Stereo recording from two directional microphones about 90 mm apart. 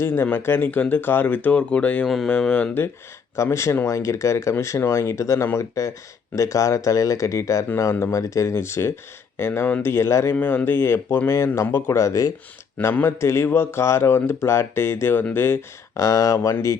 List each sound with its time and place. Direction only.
0.0 s speech: 25° left (ahead or behind)
2.0 s speech: centre (ahead or behind)
2.3 s speech: 15° left (ahead or behind)
3.3 s speech: 35° left (ahead or behind)
7.9 s speech: 25° left (ahead or behind)
8.2 s speech: 35° left (ahead or behind)
10.3 s speech: 20° left (ahead or behind); by 12.3 s 40° left (ahead or behind)
12.8 s speech: 25° left (ahead or behind)
16.0 s speech: 35° left (ahead or behind)